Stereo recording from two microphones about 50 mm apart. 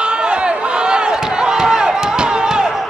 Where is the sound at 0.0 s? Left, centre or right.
Centre.